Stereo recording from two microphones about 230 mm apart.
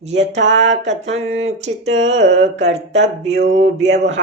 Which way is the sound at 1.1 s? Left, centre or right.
Right.